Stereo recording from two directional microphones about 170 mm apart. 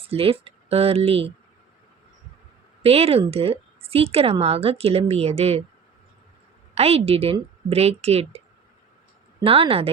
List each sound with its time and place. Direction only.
0.0 s speech: 35° right (ahead or behind)
2.8 s a woman's voice: 35° right (ahead or behind)
6.7 s a woman's voice: 35° right (ahead or behind)
9.4 s a woman's voice: 35° right (ahead or behind)